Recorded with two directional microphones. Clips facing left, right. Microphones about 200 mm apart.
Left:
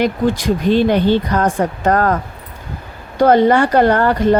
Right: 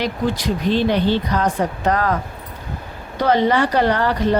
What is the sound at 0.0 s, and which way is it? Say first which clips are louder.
Speech: left 5 dB; 50° left (ahead or behind).